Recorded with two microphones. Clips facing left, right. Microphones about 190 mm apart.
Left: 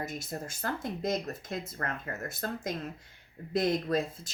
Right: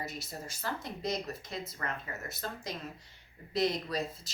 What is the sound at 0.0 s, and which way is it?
Speech, 50° left (ahead or behind).